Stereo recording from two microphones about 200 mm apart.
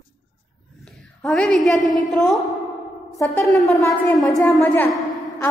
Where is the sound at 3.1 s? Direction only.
15° left (ahead or behind).